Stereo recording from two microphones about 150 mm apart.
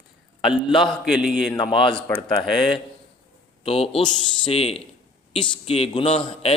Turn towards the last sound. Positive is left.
turn(degrees=40)  # may be behind; listen again after turning